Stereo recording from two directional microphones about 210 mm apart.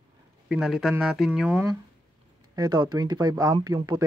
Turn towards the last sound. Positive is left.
turn(degrees=-20)  # may be behind; listen again after turning